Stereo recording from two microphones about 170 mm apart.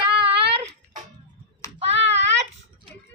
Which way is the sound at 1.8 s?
35° right (ahead or behind).